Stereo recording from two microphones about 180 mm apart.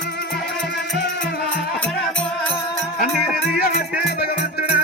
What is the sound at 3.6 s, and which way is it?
Music, 60° left (ahead or behind).